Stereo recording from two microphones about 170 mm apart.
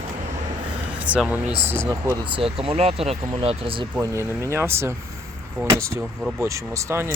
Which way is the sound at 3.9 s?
15° right (ahead or behind).